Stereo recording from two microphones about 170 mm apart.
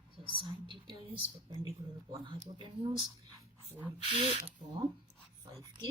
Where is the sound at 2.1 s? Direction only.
30° right (ahead or behind).